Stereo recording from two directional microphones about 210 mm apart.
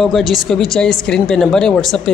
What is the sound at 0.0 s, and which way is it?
Speech, centre (ahead or behind).